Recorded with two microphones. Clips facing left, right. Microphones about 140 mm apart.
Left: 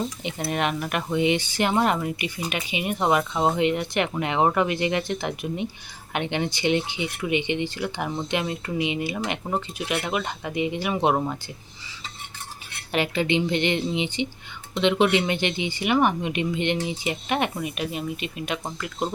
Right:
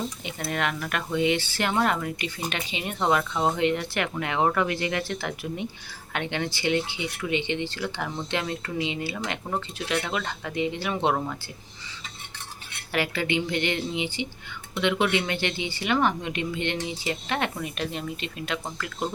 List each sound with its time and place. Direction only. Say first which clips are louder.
0.3 s speech: left 3 dB; 20° left (ahead or behind)
12.9 s speech: left 3 dB; 20° left (ahead or behind)